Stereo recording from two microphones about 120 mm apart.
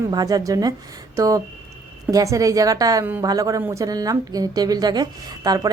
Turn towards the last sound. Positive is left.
turn(degrees=-35)  # may be behind; listen again after turning